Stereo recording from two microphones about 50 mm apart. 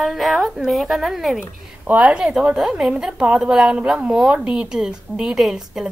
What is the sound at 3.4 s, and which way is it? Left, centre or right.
Speech, centre.